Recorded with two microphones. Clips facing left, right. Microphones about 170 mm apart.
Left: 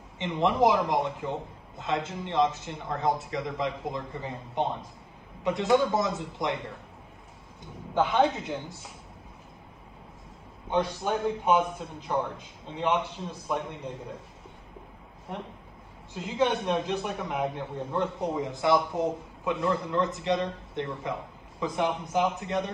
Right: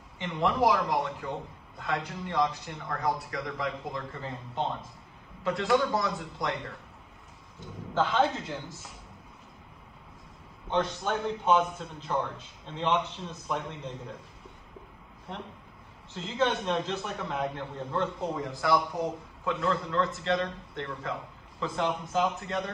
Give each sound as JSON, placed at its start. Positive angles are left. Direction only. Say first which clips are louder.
{"t": 0.2, "sound": "speech", "louder": "left 3 dB", "side_deg": 20}
{"t": 7.9, "sound": "a man's voice", "louder": "left 2 dB", "side_deg": 15}
{"t": 10.7, "sound": "a man's voice", "louder": "left 2 dB", "side_deg": 10}
{"t": 15.3, "sound": "a man's voice", "louder": "left 3 dB", "side_deg": 10}